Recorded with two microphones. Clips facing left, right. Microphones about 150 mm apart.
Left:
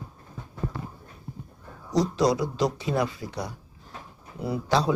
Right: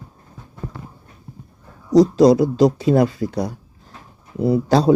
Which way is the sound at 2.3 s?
45° right (ahead or behind).